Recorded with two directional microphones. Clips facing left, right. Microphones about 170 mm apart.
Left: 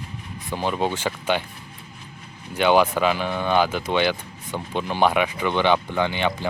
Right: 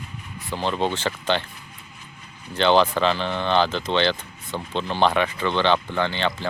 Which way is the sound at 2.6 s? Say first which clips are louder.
Even; 10° left (ahead or behind).